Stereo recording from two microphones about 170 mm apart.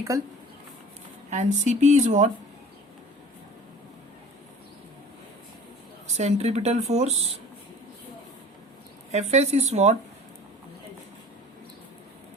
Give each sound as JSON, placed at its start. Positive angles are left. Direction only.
{"t": 1.3, "sound": "speech", "side_deg": -45}
{"t": 6.1, "sound": "speech", "side_deg": -40}
{"t": 9.1, "sound": "speech", "side_deg": -40}